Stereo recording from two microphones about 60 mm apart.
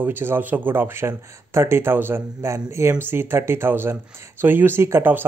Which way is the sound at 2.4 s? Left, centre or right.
Right.